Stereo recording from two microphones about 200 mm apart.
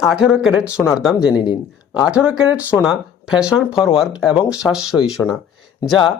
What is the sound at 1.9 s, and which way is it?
Speech, 5° right (ahead or behind).